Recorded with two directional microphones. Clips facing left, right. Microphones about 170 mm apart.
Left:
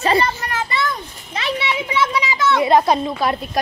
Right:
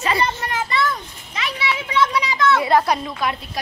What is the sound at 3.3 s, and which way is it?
Speech, 50° left (ahead or behind).